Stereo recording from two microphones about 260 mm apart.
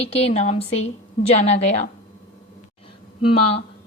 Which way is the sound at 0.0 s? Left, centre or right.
Left.